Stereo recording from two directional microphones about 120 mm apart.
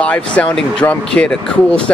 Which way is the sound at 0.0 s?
10° left (ahead or behind).